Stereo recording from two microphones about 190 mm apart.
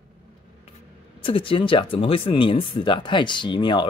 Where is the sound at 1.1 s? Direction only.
30° left (ahead or behind).